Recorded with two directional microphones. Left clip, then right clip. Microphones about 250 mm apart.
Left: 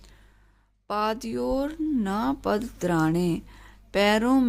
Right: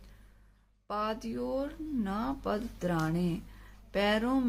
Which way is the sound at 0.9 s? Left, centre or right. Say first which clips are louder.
Left 7 dB; left.